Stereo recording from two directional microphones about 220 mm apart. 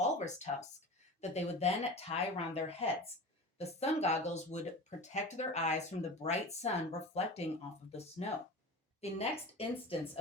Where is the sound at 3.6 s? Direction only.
30° left (ahead or behind).